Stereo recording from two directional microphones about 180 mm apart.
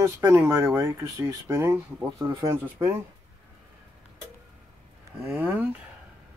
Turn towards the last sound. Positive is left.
turn(degrees=-10)  # may be behind; listen again after turning